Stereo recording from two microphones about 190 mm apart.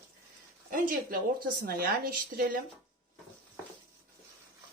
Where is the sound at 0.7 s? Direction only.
45° right (ahead or behind).